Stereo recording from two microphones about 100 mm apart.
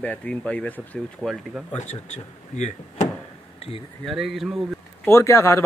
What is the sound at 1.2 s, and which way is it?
Speech, centre (ahead or behind).